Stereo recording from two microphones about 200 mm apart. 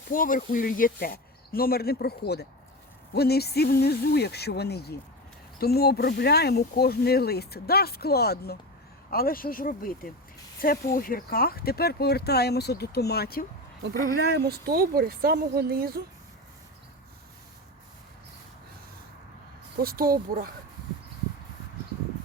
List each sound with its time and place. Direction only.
0.1 s speech: 45° left (ahead or behind)
14.3 s speech: 50° right (ahead or behind)
19.8 s speech: 50° right (ahead or behind)